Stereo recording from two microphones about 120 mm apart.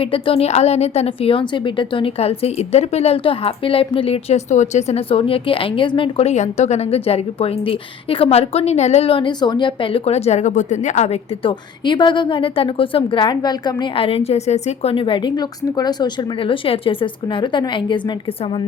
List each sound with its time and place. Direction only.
0.0 s a woman's voice: 50° left (ahead or behind); by 11.2 s 70° left (ahead or behind)
11.4 s a woman's voice: 40° left (ahead or behind); by 15.0 s 60° left (ahead or behind)
15.0 s a woman's voice: 40° left (ahead or behind)